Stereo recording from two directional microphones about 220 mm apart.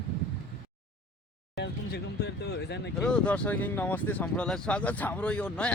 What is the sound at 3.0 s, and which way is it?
Speech, 5° left (ahead or behind).